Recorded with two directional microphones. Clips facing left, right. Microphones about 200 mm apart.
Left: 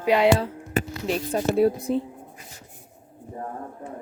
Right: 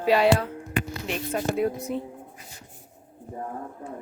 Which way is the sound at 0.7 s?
40° left (ahead or behind).